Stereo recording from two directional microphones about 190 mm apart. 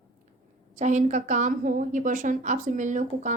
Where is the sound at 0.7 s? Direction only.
40° right (ahead or behind).